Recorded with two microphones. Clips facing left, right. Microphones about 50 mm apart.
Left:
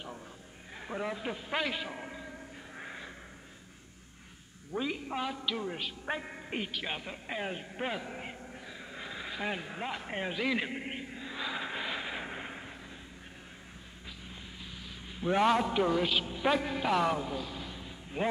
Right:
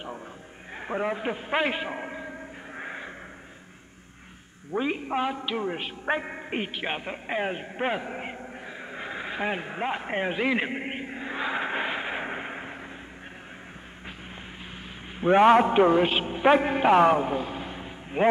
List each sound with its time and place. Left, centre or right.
0.7 s a sound: right
4.7 s a man's voice: right
15.1 s a man's voice: right